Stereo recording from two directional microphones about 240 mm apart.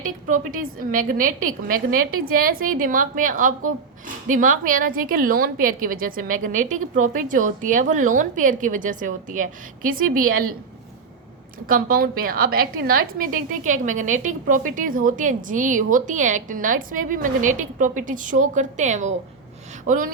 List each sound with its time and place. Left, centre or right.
0.0 s a woman's voice: right
11.6 s a woman's voice: right